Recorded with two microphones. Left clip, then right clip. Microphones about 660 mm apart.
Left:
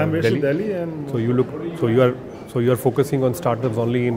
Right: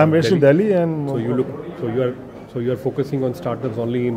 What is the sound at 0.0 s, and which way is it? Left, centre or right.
Speech, right.